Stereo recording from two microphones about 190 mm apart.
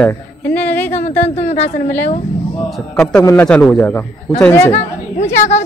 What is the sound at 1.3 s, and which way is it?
Speech, 35° left (ahead or behind).